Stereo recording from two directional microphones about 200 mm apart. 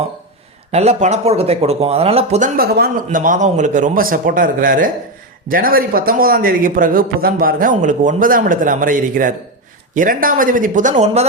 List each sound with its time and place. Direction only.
0.7 s speech: 35° right (ahead or behind)
2.6 s a man's voice: 50° right (ahead or behind); by 11.3 s 35° right (ahead or behind)